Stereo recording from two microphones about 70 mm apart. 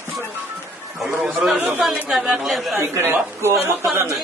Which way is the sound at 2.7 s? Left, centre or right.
Right.